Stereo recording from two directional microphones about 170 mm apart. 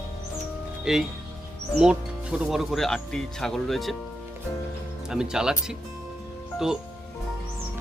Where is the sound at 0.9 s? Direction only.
5° right (ahead or behind).